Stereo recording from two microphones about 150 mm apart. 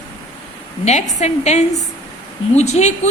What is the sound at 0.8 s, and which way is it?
A woman's voice, 50° left (ahead or behind).